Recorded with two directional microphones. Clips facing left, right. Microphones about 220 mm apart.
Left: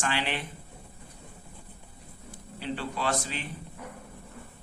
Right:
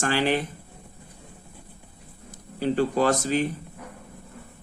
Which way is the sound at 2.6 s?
45° right (ahead or behind).